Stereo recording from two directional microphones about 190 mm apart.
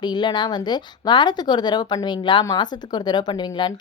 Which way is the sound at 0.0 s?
25° left (ahead or behind).